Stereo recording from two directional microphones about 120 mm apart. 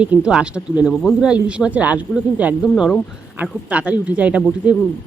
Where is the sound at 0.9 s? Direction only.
5° left (ahead or behind); by 2.0 s 10° right (ahead or behind).